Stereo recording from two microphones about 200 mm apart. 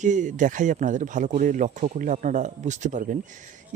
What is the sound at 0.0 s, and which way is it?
Speech, 40° right (ahead or behind).